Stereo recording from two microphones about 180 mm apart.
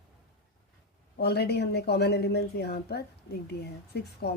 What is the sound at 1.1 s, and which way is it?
A woman's voice, 65° left (ahead or behind).